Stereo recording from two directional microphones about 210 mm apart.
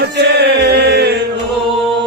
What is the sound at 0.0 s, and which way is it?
Chant, 50° right (ahead or behind).